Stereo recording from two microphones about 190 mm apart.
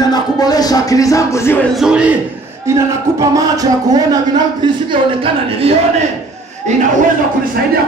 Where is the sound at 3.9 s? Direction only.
20° right (ahead or behind); by 6.8 s 40° right (ahead or behind).